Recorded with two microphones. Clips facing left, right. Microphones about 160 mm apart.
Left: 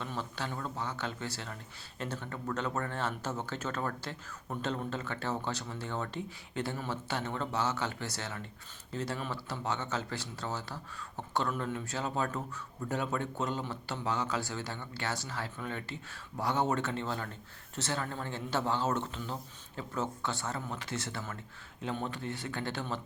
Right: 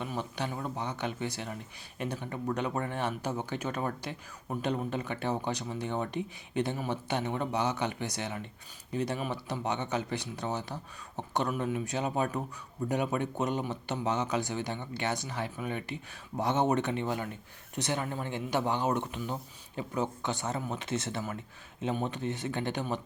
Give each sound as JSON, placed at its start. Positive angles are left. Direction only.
{"t": 0.0, "sound": "speech", "side_deg": -15}